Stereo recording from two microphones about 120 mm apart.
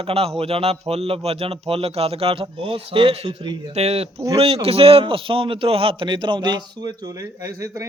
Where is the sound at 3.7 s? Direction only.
60° right (ahead or behind).